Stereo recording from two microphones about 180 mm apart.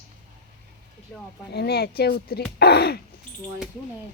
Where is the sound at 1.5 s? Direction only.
60° left (ahead or behind).